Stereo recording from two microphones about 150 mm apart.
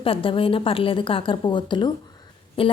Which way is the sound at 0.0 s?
35° left (ahead or behind).